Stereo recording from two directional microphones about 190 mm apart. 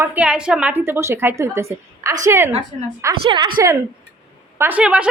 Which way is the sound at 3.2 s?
25° right (ahead or behind).